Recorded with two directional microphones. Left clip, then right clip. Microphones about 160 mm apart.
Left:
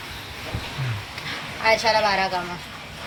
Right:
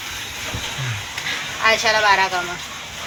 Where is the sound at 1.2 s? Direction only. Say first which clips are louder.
Right 3 dB; 15° right (ahead or behind).